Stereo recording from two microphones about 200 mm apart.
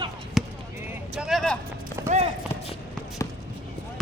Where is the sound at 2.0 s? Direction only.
35° right (ahead or behind).